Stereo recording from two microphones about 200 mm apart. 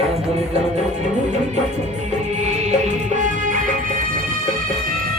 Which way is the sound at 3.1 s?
40° right (ahead or behind).